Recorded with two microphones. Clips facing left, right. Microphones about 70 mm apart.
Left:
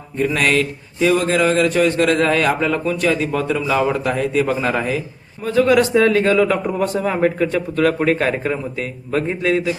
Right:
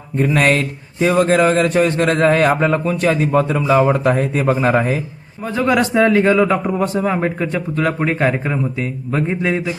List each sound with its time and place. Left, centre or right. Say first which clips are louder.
0.3 s a man's voice: right 2 dB; right; by 9.4 s centre
9.4 s a man's voice: left 1 dB; right